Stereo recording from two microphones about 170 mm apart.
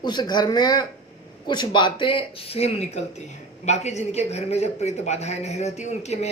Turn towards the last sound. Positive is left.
turn(degrees=40)  # may be behind; listen again after turning